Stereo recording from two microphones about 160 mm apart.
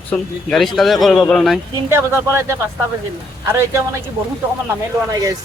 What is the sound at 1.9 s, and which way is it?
Speech, 15° right (ahead or behind).